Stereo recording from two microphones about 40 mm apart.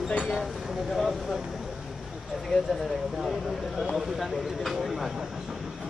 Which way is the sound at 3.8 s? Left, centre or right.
Centre.